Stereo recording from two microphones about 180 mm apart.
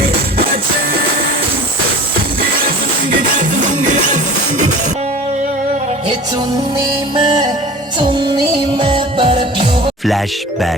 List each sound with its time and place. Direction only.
0.0 s music: 55° right (ahead or behind)
2.6 s music: 50° right (ahead or behind)
7.2 s music: 25° right (ahead or behind)